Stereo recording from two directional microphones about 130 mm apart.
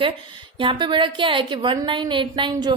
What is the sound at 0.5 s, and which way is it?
A woman's voice, 40° right (ahead or behind).